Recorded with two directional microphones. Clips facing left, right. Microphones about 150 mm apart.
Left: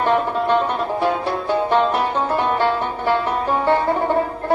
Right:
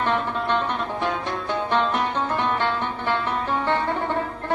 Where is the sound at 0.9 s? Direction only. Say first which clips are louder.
Left 6 dB; 10° left (ahead or behind).